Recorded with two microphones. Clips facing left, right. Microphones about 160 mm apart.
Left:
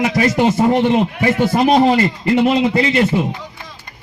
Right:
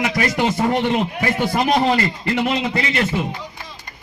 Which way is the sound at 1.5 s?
25° left (ahead or behind).